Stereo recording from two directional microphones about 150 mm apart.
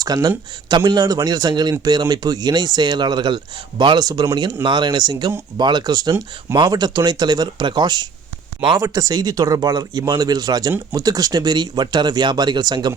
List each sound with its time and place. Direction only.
0.0 s speech: 25° right (ahead or behind)